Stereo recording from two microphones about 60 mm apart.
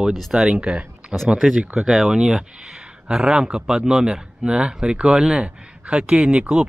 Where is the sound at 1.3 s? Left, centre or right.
Centre.